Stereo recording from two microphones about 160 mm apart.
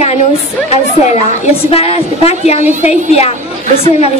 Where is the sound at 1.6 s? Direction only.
40° left (ahead or behind).